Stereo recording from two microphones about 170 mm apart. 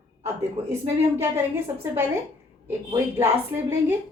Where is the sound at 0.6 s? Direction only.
35° right (ahead or behind).